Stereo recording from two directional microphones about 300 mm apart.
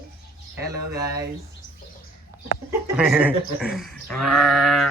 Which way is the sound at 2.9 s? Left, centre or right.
Centre.